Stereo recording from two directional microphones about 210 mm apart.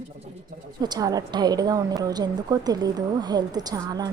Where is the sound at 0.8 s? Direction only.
20° right (ahead or behind).